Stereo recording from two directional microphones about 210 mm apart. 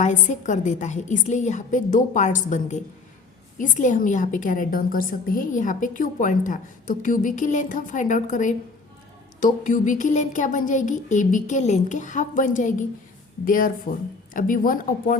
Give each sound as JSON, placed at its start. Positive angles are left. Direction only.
{"t": 0.0, "sound": "a woman's voice", "side_deg": 35}